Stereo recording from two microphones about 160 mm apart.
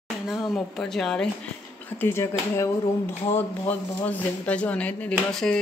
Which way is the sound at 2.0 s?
15° left (ahead or behind).